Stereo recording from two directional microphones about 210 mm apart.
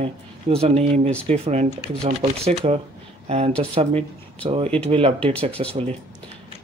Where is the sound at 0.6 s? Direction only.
30° right (ahead or behind).